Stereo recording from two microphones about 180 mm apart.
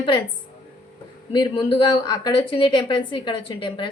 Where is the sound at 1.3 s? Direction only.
25° left (ahead or behind).